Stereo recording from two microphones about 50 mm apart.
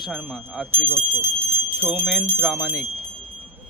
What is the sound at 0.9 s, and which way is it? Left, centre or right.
Speech, right.